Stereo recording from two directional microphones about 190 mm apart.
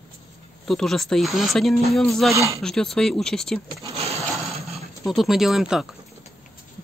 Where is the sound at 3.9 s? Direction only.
35° right (ahead or behind).